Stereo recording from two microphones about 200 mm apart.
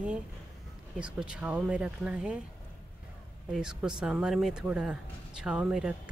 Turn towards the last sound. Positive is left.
turn(degrees=-5)  # may be behind; listen again after turning